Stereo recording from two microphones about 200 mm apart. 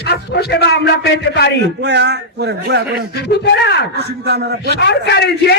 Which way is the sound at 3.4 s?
60° left (ahead or behind).